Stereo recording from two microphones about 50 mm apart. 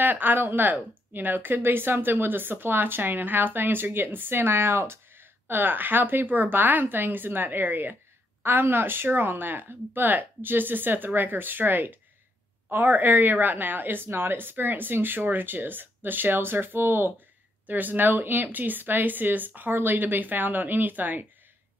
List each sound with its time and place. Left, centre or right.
0.0 s speech: right
17.6 s speech: right